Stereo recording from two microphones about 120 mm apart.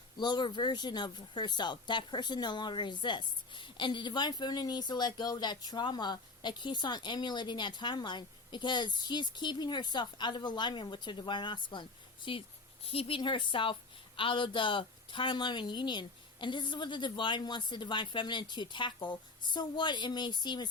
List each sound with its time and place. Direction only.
0.2 s speech: 40° left (ahead or behind)